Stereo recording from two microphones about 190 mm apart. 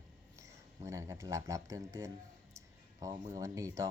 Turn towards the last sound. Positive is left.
turn(degrees=-15)  # may be behind; listen again after turning